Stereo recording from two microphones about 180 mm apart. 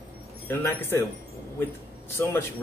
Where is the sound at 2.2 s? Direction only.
15° left (ahead or behind).